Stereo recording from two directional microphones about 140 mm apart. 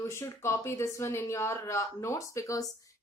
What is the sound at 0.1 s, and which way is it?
Speech, 20° left (ahead or behind).